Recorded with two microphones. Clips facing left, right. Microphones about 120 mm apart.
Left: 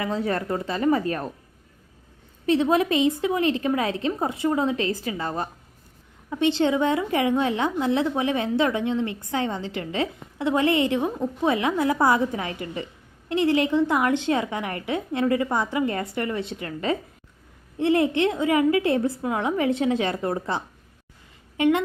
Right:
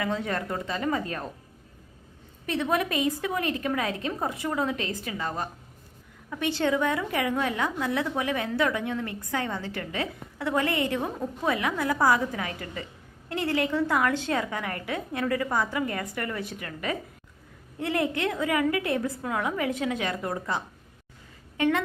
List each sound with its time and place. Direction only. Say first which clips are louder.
0.0 s a woman's voice: left 3 dB; 30° left (ahead or behind)
2.5 s a woman's voice: left 6 dB; 30° left (ahead or behind)
6.3 s a woman's voice: left 5 dB; 20° left (ahead or behind)
21.6 s a woman's voice: left 4 dB; 20° left (ahead or behind)